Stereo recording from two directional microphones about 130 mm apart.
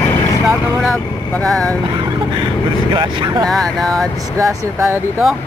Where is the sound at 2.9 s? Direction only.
35° right (ahead or behind).